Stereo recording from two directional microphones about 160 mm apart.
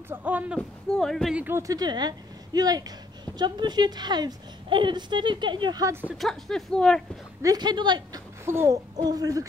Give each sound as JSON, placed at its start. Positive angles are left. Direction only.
{"t": 0.1, "sound": "speech", "side_deg": -10}
{"t": 0.6, "sound": "speech", "side_deg": 5}
{"t": 1.4, "sound": "a woman's voice", "side_deg": -15}
{"t": 6.1, "sound": "speech", "side_deg": 0}
{"t": 7.4, "sound": "a woman's voice", "side_deg": -25}
{"t": 8.5, "sound": "a woman's voice", "side_deg": -15}